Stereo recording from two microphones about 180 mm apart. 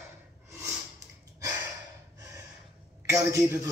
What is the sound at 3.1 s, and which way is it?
Speech, 15° right (ahead or behind).